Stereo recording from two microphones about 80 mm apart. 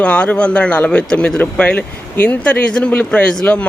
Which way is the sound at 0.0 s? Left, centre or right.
Centre.